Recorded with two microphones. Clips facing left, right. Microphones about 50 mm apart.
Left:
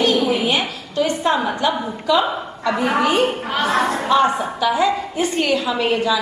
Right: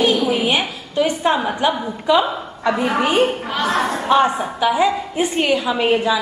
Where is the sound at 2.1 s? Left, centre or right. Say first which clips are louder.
Right 1 dB; right.